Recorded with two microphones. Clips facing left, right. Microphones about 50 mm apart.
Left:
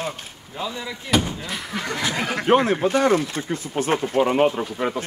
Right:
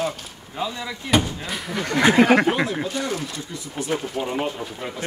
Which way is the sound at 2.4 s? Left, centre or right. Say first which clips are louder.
Left 5 dB; left.